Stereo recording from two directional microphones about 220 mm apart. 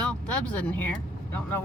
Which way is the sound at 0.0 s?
5° left (ahead or behind).